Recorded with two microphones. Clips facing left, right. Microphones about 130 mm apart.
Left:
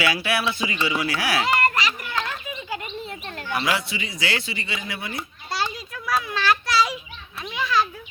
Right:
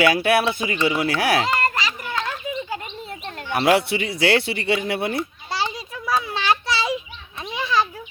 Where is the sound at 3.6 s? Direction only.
60° right (ahead or behind).